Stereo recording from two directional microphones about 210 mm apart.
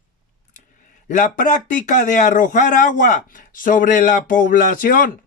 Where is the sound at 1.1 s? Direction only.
35° left (ahead or behind).